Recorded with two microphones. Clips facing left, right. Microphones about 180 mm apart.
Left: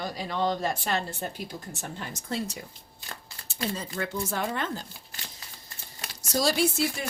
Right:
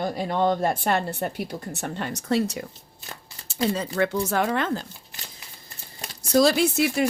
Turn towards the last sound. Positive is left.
turn(degrees=-70)  # may be behind; listen again after turning